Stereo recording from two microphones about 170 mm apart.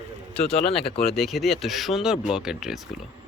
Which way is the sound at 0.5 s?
35° left (ahead or behind).